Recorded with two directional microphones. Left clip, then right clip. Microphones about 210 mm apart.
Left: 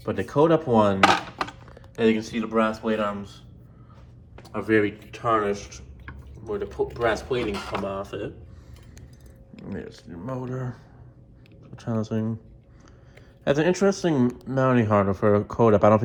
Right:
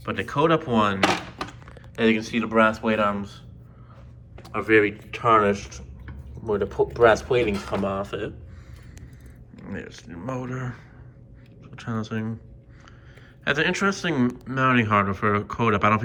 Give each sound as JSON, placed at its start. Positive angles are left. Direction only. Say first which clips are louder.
{"t": 0.0, "sound": "speech", "louder": "left 1 dB", "side_deg": 25}
{"t": 1.0, "sound": "a sound", "louder": "left 4 dB", "side_deg": 0}
{"t": 1.6, "sound": "speech", "louder": "right 1 dB", "side_deg": 20}
{"t": 4.4, "sound": "speech", "louder": "right 3 dB", "side_deg": 20}
{"t": 5.1, "sound": "speech", "louder": "right 5 dB", "side_deg": 10}
{"t": 6.1, "sound": "speech", "louder": "right 5 dB", "side_deg": 0}
{"t": 7.9, "sound": "speech", "louder": "right 3 dB", "side_deg": 15}
{"t": 9.6, "sound": "speech", "louder": "even", "side_deg": 25}
{"t": 13.4, "sound": "speech", "louder": "left 1 dB", "side_deg": 30}